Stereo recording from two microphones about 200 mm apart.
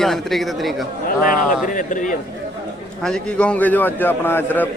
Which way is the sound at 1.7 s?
40° left (ahead or behind).